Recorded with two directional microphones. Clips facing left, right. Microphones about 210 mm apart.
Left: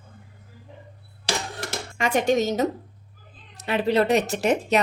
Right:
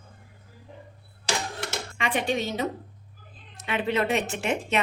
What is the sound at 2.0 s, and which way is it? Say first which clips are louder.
A woman's voice: left 6 dB; 45° left (ahead or behind).